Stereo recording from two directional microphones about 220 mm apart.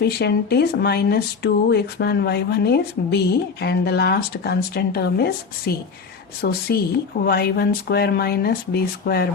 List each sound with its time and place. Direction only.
0.0 s speech: 50° left (ahead or behind)